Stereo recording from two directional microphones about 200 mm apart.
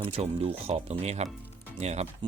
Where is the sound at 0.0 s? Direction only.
30° right (ahead or behind).